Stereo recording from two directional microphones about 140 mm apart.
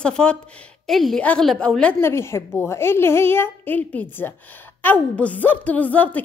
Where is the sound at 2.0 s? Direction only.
20° left (ahead or behind).